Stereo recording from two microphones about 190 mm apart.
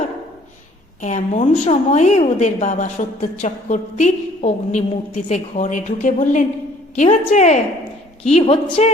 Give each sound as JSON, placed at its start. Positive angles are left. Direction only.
{"t": 1.0, "sound": "a woman's voice", "side_deg": 40}